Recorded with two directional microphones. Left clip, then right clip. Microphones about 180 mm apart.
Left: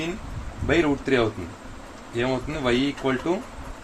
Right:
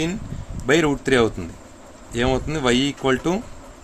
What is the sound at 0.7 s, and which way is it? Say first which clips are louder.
Speech: right 4 dB; 60° right (ahead or behind).